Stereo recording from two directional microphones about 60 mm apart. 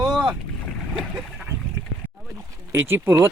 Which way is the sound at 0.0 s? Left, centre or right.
Centre.